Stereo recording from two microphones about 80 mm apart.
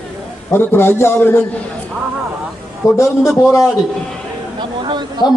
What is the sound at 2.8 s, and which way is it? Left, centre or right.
Speech, left.